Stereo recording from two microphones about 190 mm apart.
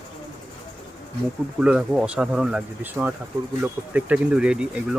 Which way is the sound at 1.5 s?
5° right (ahead or behind).